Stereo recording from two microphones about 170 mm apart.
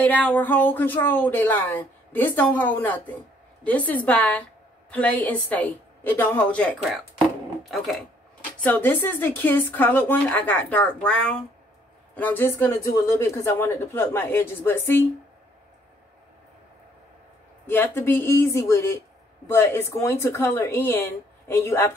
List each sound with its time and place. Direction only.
0.0 s speech: 10° left (ahead or behind)
17.6 s speech: 15° left (ahead or behind)